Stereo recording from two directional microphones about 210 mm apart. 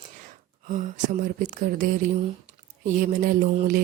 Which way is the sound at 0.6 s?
35° right (ahead or behind).